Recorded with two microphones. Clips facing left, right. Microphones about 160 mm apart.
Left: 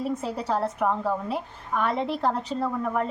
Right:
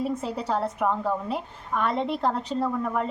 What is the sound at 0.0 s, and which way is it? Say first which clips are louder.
A woman's voice: even; centre (ahead or behind).